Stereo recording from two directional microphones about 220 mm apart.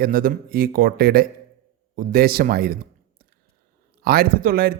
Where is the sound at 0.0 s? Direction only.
40° right (ahead or behind).